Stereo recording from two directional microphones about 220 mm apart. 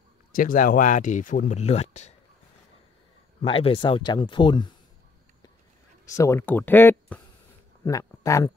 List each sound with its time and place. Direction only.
0.3 s speech: 40° left (ahead or behind)
3.4 s speech: 25° left (ahead or behind)
6.0 s speech: 15° left (ahead or behind)